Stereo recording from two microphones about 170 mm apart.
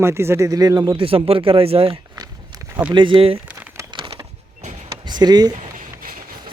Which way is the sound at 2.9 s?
30° right (ahead or behind).